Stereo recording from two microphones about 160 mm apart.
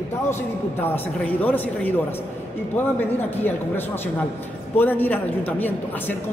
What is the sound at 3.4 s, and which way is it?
A man's voice, 10° left (ahead or behind).